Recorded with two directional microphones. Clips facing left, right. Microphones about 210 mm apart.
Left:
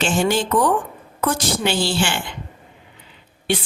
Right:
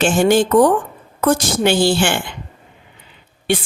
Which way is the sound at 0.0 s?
50° right (ahead or behind).